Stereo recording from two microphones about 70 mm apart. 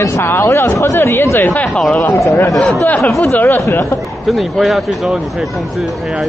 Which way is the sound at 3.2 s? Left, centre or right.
Left.